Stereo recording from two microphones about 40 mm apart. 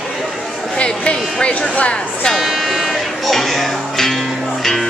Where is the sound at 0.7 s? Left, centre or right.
Left.